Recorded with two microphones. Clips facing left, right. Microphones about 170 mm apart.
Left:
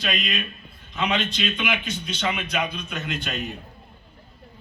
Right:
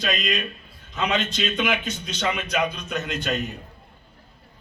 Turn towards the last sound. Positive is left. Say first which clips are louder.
# right 3 dB
turn(degrees=-40)  # may be behind; listen again after turning